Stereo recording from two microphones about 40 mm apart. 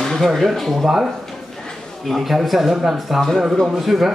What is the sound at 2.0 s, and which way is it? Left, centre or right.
Speech, centre.